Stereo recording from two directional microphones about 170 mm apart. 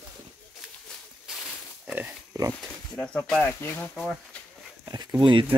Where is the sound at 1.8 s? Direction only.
10° right (ahead or behind).